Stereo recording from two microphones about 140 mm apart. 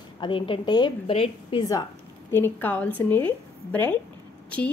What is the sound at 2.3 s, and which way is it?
A woman's voice, 15° left (ahead or behind).